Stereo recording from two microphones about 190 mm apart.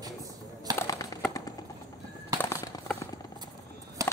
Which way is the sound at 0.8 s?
20° left (ahead or behind).